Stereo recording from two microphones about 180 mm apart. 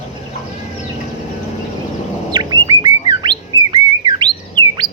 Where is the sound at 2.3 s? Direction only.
20° right (ahead or behind).